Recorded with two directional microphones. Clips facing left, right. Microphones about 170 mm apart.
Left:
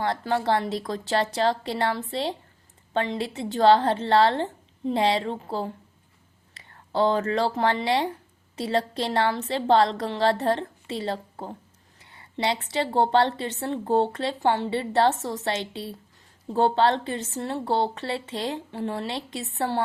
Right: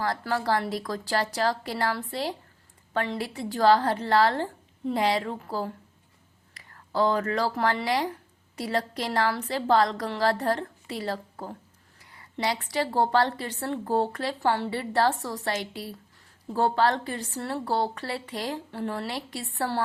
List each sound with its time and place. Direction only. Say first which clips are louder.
0.0 s a woman's voice: left 3 dB; 25° left (ahead or behind)